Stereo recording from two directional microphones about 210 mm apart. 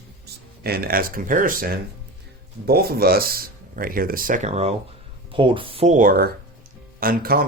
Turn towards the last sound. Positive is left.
turn(degrees=-45)  # may be behind; listen again after turning